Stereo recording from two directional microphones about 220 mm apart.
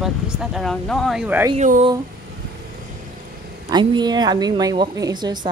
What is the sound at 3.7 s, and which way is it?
A woman's voice, 20° right (ahead or behind).